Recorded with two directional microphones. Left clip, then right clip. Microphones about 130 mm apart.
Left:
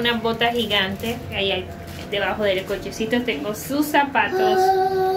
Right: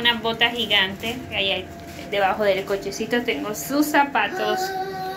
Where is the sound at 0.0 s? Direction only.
20° left (ahead or behind).